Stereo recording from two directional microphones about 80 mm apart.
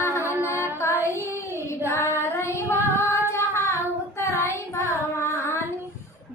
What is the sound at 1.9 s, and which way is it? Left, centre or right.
Child singing, left.